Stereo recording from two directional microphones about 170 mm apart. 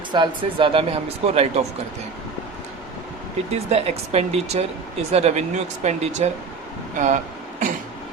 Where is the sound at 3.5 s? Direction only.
40° right (ahead or behind).